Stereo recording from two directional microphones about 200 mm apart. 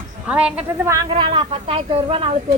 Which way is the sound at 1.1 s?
30° right (ahead or behind).